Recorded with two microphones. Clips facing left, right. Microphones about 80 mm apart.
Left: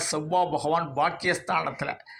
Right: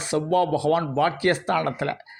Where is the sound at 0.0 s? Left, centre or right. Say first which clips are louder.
Right 3 dB; right.